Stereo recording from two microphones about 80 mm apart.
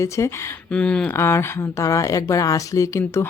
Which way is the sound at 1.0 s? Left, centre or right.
Left.